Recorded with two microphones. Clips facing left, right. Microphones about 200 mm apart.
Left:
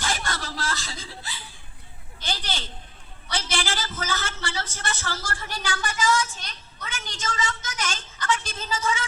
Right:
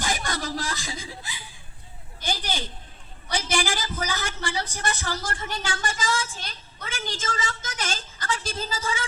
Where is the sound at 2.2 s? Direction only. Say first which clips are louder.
Right 2 dB; 15° right (ahead or behind); by 6.4 s 30° right (ahead or behind).